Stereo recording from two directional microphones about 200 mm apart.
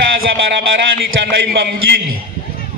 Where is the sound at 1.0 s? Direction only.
55° right (ahead or behind).